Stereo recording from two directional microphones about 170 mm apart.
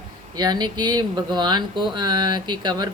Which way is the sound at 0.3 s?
25° right (ahead or behind).